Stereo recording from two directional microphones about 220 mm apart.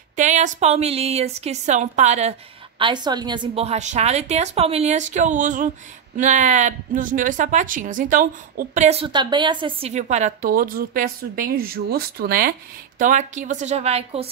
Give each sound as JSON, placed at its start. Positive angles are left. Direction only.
{"t": 0.1, "sound": "a woman's voice", "side_deg": -35}
{"t": 2.8, "sound": "a woman's voice", "side_deg": -20}